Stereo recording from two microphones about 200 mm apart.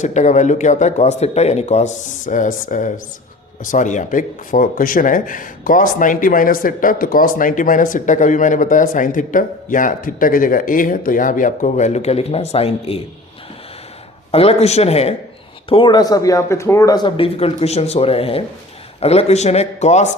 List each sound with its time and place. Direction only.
0.0 s speech: 35° left (ahead or behind)
14.3 s speech: 30° left (ahead or behind)